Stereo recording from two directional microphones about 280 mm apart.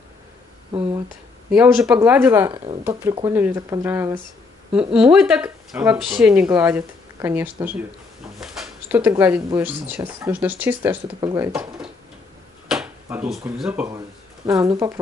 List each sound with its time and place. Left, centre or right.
0.7 s speech: centre
1.5 s speech: centre